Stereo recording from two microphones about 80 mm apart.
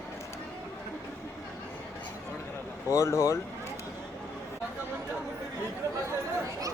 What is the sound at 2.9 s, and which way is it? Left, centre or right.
Speech, left.